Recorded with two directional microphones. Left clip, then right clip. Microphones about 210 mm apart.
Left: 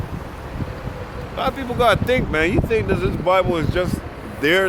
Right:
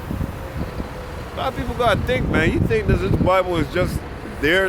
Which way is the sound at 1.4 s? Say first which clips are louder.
Left 2 dB; 20° left (ahead or behind).